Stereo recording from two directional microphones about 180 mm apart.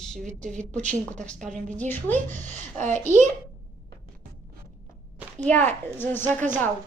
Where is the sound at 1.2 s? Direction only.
5° left (ahead or behind).